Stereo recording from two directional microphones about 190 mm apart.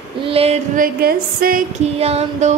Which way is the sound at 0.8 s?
50° right (ahead or behind).